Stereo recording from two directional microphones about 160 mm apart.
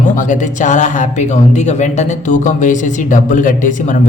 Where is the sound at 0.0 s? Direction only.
50° left (ahead or behind).